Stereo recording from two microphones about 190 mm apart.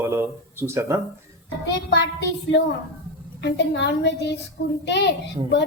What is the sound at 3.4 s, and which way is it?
Speech, 65° left (ahead or behind).